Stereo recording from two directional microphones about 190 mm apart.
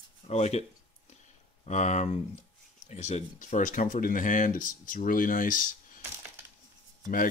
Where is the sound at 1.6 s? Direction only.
35° left (ahead or behind).